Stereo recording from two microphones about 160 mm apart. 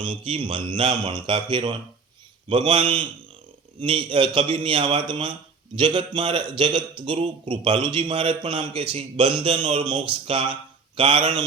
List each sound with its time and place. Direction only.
0.0 s a man's voice: 30° right (ahead or behind)